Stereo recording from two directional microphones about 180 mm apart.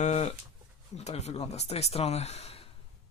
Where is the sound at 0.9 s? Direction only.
35° left (ahead or behind).